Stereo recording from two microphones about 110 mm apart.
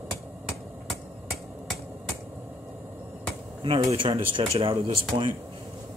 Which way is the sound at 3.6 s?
55° right (ahead or behind).